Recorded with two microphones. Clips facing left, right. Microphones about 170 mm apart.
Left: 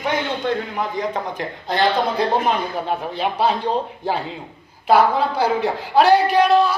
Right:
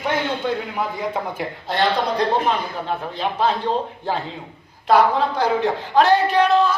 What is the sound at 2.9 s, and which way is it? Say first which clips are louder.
Speech: even; 15° left (ahead or behind).